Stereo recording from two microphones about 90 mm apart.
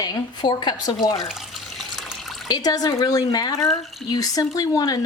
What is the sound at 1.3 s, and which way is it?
Water, centre (ahead or behind).